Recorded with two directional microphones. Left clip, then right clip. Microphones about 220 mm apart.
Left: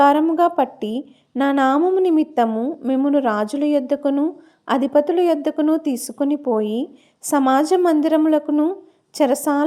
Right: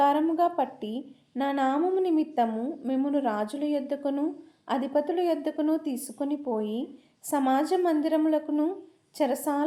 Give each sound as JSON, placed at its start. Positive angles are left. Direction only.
{"t": 0.0, "sound": "speech", "side_deg": 35}